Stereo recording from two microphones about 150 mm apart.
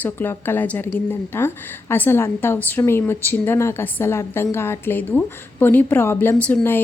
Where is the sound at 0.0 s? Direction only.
15° left (ahead or behind).